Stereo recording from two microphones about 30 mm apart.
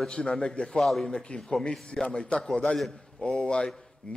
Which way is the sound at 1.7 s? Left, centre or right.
Centre.